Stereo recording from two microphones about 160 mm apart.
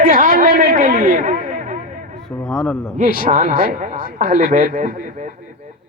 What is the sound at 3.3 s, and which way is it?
Speech, 50° right (ahead or behind).